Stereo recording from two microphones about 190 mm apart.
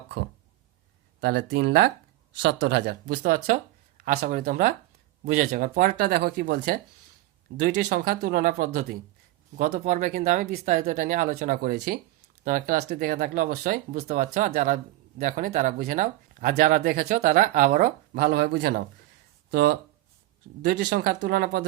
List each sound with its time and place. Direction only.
1.2 s speech: 65° right (ahead or behind)